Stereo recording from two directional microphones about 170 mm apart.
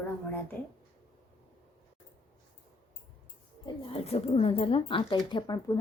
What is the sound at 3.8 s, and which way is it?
Speech, 35° left (ahead or behind).